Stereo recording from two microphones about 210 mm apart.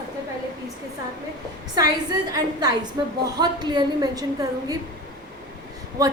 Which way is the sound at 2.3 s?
15° right (ahead or behind).